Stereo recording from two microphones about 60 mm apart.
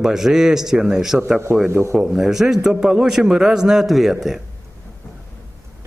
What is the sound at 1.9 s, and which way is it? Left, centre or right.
A man's voice, centre.